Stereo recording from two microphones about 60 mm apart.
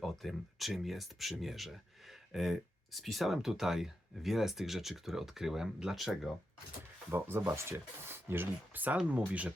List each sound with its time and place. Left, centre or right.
0.0 s speech: centre
7.1 s speech: right